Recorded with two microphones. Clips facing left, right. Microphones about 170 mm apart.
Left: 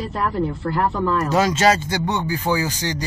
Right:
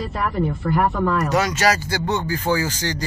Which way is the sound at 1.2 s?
25° left (ahead or behind).